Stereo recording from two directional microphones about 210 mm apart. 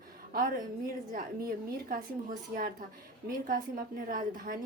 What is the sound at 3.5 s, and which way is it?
A woman's voice, 40° right (ahead or behind).